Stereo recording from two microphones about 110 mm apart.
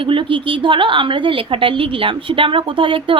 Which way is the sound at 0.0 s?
50° right (ahead or behind).